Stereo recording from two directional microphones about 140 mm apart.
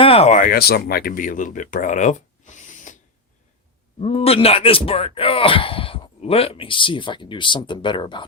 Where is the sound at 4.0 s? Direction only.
50° left (ahead or behind).